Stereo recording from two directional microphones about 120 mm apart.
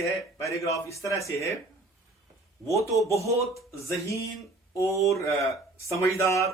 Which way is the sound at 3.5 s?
25° left (ahead or behind).